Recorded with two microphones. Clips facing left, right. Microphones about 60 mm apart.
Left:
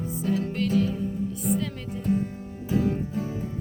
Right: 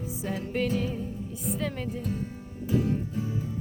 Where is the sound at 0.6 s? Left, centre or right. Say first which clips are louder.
Left 1 dB; centre.